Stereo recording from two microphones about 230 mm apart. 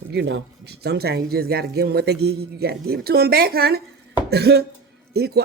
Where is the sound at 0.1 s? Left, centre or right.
Right.